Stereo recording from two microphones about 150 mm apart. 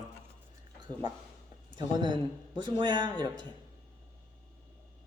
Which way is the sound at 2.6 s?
30° right (ahead or behind).